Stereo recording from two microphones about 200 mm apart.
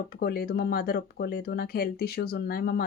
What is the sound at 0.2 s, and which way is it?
Speech, 50° left (ahead or behind).